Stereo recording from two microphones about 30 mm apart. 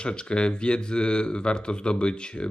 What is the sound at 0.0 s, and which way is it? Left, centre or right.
Speech, left.